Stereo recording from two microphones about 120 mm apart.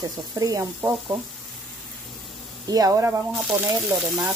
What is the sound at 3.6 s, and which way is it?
Speech, 25° right (ahead or behind).